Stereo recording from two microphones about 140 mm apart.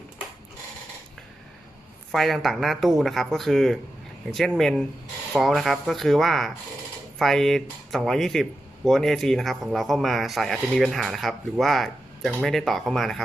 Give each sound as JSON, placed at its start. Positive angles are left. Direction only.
{"t": 2.1, "sound": "speech", "side_deg": 0}